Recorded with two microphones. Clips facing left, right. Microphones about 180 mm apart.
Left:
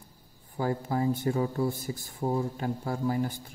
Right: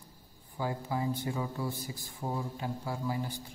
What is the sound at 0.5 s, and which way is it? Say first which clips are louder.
A man's voice: left 5 dB; 45° left (ahead or behind).